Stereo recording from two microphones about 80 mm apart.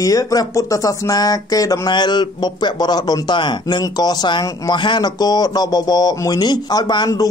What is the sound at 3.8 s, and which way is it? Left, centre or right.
Speech, left.